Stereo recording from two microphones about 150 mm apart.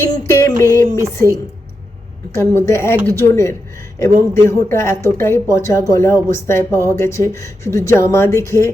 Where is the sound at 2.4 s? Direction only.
20° left (ahead or behind).